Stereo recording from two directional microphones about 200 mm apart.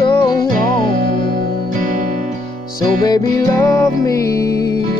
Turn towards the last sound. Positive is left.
turn(degrees=15)  # may be behind; listen again after turning